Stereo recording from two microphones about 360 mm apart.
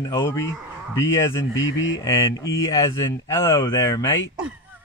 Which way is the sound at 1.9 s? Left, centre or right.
Centre.